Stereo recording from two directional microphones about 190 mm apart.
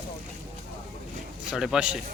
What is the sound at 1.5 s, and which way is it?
Speech, 5° right (ahead or behind).